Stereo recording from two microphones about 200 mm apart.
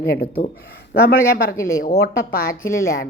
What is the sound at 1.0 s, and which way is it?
Speech, 50° left (ahead or behind).